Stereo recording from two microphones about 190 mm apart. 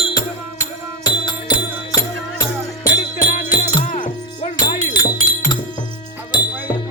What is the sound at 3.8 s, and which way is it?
Music, 35° left (ahead or behind).